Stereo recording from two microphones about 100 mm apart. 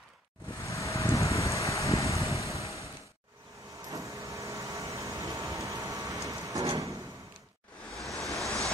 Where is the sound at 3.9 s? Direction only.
30° right (ahead or behind).